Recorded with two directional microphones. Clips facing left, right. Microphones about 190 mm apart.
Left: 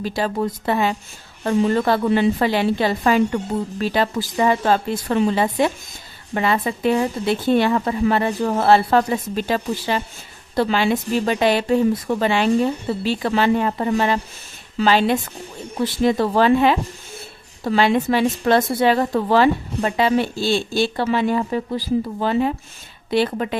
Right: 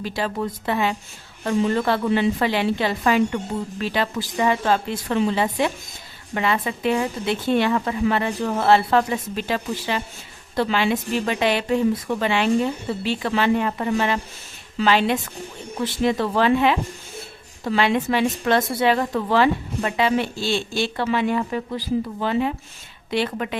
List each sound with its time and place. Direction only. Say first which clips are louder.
0.0 s a woman's voice: left 3 dB; 40° left (ahead or behind)